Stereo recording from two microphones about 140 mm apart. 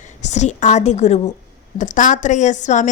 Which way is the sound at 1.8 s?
65° left (ahead or behind).